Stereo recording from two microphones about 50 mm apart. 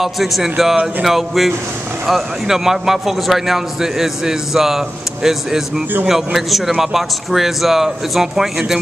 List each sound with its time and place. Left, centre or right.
0.0 s a man's voice: centre